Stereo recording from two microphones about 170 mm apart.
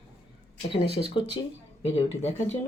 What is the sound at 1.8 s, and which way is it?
Speech, 35° left (ahead or behind).